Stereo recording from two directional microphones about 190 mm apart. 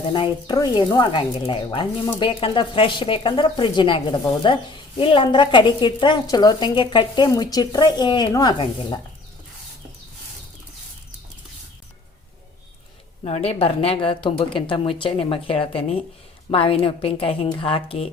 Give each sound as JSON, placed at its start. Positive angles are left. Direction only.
{"t": 0.1, "sound": "speech", "side_deg": 25}
{"t": 13.2, "sound": "speech", "side_deg": 30}